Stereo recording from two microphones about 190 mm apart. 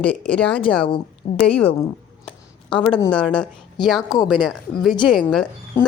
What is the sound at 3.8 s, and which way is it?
Speech, 25° left (ahead or behind).